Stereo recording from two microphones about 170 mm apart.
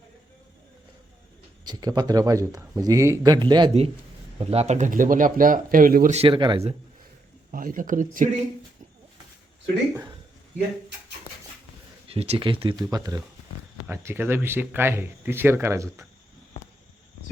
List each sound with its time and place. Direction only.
1.6 s a man's voice: 25° right (ahead or behind); by 6.1 s 55° right (ahead or behind)
6.1 s speech: 30° right (ahead or behind)
7.5 s speech: 55° right (ahead or behind)
12.0 s a man's voice: 35° right (ahead or behind); by 16.0 s 15° right (ahead or behind)